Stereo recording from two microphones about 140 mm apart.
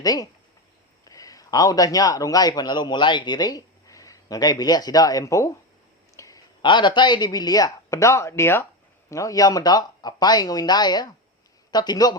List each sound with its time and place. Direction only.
0.0 s a man's voice: 25° left (ahead or behind)